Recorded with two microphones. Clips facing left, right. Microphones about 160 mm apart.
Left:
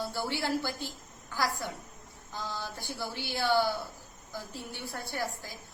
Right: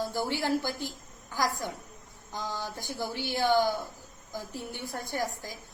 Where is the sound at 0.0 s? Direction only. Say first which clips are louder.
Right 3 dB; 15° right (ahead or behind).